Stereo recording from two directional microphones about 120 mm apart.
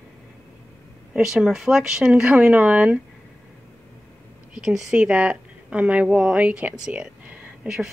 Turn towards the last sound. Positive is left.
turn(degrees=-5)  # may be behind; listen again after turning